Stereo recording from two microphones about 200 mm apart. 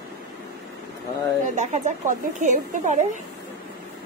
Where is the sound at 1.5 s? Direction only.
35° right (ahead or behind).